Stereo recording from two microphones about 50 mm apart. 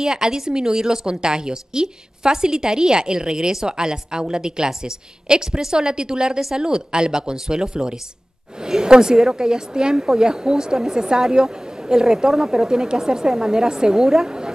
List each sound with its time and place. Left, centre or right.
0.0 s a woman's voice: centre